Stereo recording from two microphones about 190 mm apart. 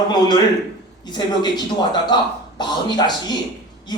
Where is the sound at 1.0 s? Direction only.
20° left (ahead or behind).